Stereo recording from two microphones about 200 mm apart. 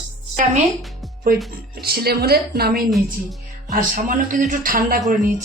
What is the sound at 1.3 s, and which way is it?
Speech, 45° right (ahead or behind).